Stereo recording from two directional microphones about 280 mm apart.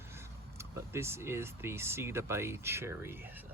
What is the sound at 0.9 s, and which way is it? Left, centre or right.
Speech, centre.